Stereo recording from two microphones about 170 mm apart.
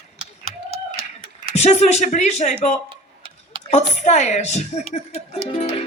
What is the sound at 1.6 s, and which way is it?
Speech, 40° left (ahead or behind).